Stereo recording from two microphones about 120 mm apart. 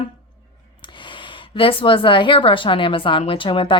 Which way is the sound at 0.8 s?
45° left (ahead or behind).